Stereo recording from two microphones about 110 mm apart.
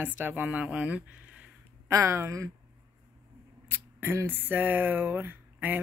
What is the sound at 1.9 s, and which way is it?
Speech, 25° right (ahead or behind).